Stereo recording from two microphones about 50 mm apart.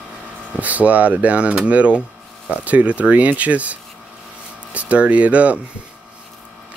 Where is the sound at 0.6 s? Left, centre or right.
Right.